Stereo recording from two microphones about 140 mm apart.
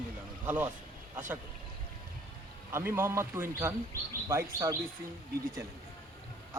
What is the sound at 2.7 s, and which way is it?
A man's voice, 15° right (ahead or behind).